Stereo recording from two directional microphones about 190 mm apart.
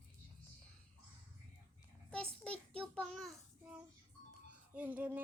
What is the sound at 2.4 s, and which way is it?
Child singing, 5° left (ahead or behind).